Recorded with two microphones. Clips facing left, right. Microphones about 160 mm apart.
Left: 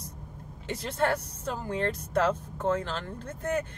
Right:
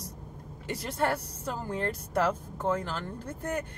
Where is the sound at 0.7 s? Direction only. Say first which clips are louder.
Left 2 dB; 10° right (ahead or behind).